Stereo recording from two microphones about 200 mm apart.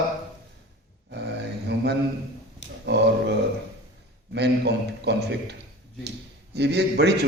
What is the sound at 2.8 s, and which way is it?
Speech, 60° right (ahead or behind).